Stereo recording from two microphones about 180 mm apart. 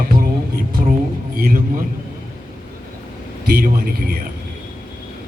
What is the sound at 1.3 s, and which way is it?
Speech, 50° right (ahead or behind).